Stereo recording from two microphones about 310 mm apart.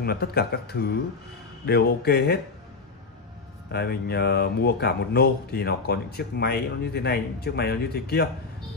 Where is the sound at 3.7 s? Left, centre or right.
Left.